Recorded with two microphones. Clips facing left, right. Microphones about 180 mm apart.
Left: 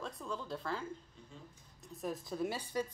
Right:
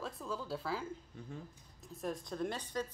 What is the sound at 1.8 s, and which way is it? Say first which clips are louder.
Speech: even; centre (ahead or behind).